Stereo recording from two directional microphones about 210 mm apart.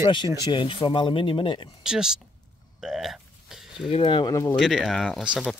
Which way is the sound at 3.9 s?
25° left (ahead or behind).